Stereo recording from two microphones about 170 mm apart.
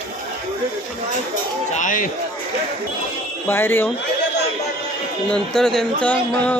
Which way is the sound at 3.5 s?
10° left (ahead or behind).